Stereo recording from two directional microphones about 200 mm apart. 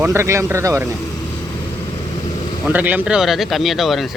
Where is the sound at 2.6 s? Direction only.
10° right (ahead or behind).